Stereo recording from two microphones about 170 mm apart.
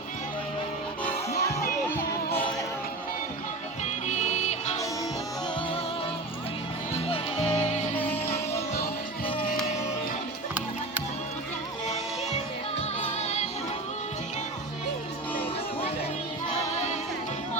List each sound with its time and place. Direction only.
1.0 s music: 35° left (ahead or behind)
1.5 s music: 15° left (ahead or behind)
3.8 s music: 45° left (ahead or behind)
6.9 s music: 35° left (ahead or behind)
13.0 s music: 45° left (ahead or behind)
16.7 s music: 40° left (ahead or behind)